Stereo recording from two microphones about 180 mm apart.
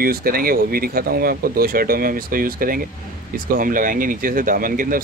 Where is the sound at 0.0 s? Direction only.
55° right (ahead or behind).